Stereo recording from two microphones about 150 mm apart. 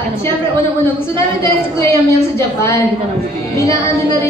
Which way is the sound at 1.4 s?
15° left (ahead or behind).